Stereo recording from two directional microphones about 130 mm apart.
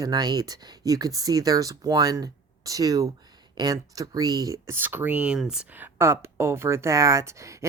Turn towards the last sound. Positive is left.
turn(degrees=-25)  # may be behind; listen again after turning